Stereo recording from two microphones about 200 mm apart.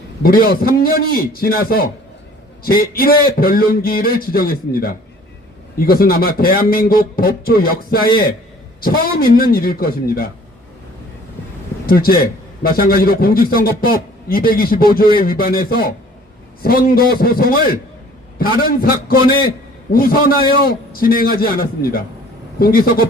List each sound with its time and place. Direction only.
0.2 s a man's voice: 50° left (ahead or behind)
11.9 s a man's voice: 45° left (ahead or behind)